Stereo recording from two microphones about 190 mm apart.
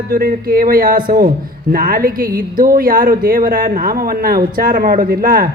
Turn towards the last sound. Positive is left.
turn(degrees=-50)  # may be behind; listen again after turning